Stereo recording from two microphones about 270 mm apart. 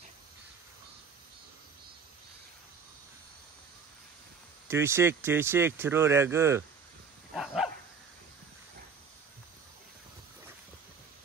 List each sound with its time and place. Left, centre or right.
4.6 s speech: centre
7.3 s dog: centre